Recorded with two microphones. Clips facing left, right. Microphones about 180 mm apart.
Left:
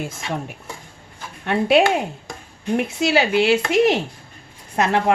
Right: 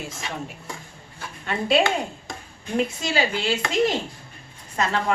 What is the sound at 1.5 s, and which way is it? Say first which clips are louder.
A woman's voice: left 5 dB; 60° left (ahead or behind).